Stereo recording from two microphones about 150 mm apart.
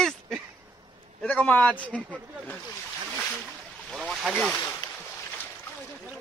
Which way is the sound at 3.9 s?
Centre (ahead or behind).